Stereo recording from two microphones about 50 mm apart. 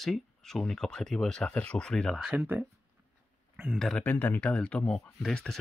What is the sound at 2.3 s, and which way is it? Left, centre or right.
Speech, right.